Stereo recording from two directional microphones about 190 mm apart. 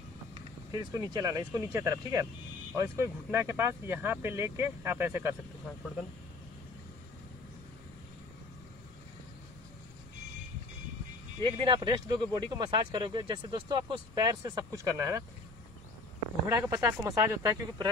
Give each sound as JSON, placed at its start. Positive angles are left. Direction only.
{"t": 0.7, "sound": "speech", "side_deg": -20}
{"t": 11.4, "sound": "speech", "side_deg": -25}
{"t": 16.4, "sound": "speech", "side_deg": -15}